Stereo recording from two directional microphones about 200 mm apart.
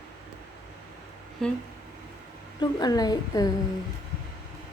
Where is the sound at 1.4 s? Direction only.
Centre (ahead or behind).